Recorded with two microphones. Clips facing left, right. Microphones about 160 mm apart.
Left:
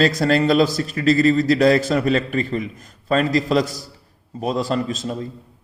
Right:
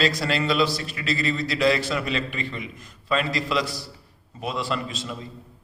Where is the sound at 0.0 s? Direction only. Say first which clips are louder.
Left 7 dB; 45° left (ahead or behind).